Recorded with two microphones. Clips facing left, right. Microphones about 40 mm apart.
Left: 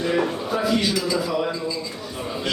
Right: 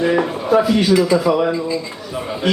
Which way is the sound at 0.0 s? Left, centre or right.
Right.